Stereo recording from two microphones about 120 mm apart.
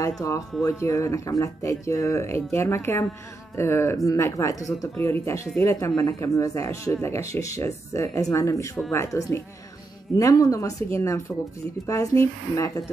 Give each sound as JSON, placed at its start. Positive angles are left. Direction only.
{"t": 0.2, "sound": "speech", "side_deg": 25}